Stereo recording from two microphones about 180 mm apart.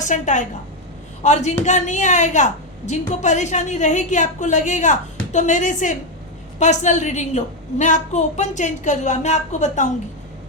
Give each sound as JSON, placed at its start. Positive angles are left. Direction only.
{"t": 0.0, "sound": "a woman's voice", "side_deg": 45}